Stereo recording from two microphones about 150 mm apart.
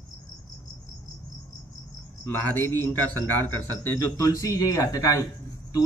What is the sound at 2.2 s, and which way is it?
A man's voice, 15° left (ahead or behind).